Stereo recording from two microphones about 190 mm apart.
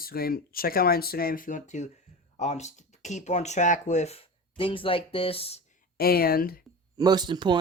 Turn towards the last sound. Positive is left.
turn(degrees=-25)  # may be behind; listen again after turning